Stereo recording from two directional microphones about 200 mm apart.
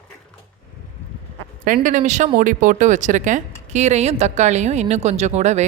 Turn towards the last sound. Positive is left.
turn(degrees=-35)  # may be behind; listen again after turning